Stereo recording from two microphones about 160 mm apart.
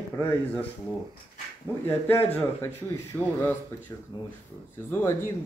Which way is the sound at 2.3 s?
10° left (ahead or behind).